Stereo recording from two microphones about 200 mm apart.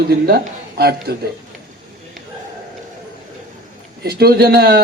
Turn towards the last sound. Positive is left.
turn(degrees=-50)  # may be behind; listen again after turning